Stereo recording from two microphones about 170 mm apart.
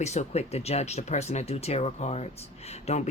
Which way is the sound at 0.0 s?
40° left (ahead or behind).